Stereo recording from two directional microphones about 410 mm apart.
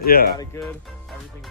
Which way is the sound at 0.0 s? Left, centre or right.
Left.